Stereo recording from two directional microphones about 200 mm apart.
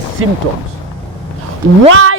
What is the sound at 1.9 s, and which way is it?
Speech, 90° right.